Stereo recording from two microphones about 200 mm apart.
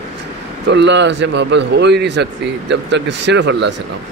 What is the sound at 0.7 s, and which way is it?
A man's voice, 60° right (ahead or behind).